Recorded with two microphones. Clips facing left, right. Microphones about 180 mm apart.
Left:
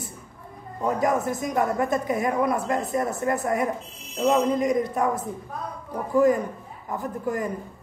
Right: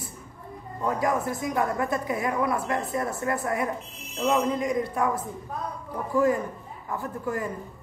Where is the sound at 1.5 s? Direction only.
20° left (ahead or behind).